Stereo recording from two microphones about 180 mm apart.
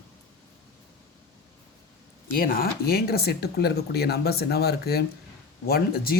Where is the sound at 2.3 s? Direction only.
55° left (ahead or behind).